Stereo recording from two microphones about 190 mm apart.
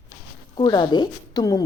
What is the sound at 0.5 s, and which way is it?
A woman's voice, 20° left (ahead or behind).